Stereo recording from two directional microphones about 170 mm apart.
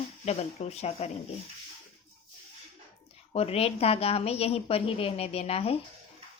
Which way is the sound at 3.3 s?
35° left (ahead or behind).